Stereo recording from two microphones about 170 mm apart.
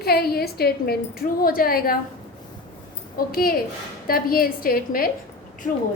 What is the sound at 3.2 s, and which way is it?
A woman's voice, 60° left (ahead or behind).